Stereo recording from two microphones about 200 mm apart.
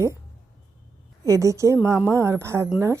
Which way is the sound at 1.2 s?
15° right (ahead or behind).